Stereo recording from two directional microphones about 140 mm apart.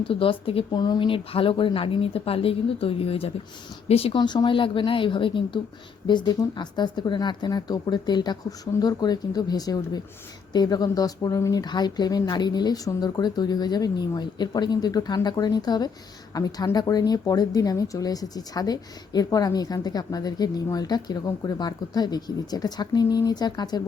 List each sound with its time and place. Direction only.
0.1 s speech: 40° left (ahead or behind)